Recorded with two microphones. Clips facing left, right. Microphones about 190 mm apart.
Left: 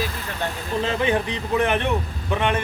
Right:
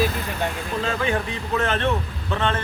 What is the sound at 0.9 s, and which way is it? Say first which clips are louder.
A man's voice: left 2 dB; 20° left (ahead or behind).